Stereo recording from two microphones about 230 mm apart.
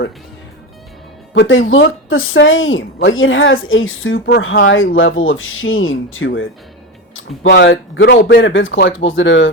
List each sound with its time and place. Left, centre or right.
1.3 s a woman's voice: left
7.4 s speech: left